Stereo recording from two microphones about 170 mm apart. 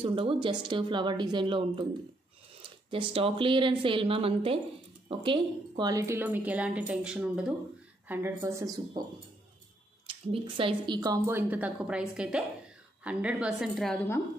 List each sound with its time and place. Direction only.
0.0 s speech: 30° right (ahead or behind)
10.0 s a woman's voice: 30° right (ahead or behind); by 14.2 s 10° left (ahead or behind)